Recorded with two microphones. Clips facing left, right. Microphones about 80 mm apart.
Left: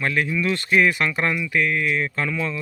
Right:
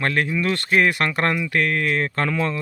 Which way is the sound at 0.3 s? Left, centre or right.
Right.